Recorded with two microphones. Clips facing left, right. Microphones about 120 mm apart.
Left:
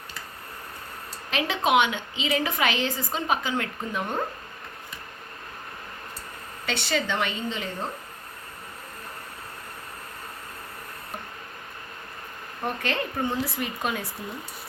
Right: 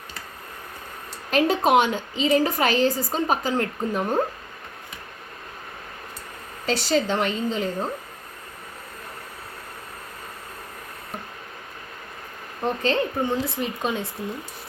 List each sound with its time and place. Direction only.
1.3 s a woman's voice: 40° right (ahead or behind)
6.8 s a woman's voice: 40° right (ahead or behind)
12.6 s speech: 25° right (ahead or behind)
13.2 s a woman's voice: 15° right (ahead or behind)